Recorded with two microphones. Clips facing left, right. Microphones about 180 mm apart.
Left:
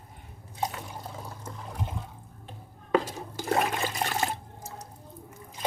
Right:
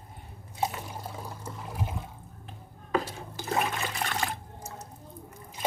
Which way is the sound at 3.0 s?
40° left (ahead or behind).